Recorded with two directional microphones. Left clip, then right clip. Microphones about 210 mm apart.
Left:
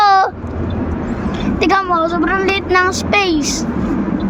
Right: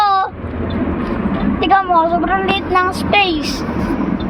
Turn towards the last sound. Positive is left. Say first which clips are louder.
# even
turn(degrees=25)  # may be behind; listen again after turning